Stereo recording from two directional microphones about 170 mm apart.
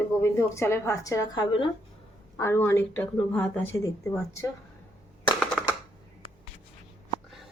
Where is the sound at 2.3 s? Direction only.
15° left (ahead or behind).